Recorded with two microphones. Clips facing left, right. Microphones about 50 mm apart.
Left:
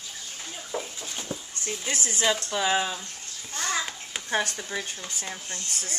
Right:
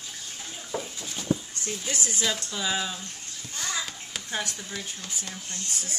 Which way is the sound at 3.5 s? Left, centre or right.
Left.